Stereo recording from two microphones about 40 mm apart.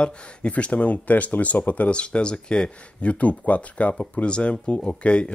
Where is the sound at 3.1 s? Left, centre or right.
Left.